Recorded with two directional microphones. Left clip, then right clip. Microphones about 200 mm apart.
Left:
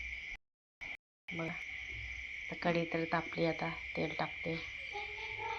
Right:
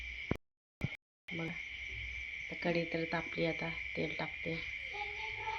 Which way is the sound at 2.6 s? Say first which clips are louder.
Left 1 dB; 10° right (ahead or behind).